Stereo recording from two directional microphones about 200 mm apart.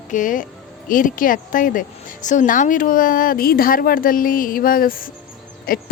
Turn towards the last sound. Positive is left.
turn(degrees=45)  # may be behind; listen again after turning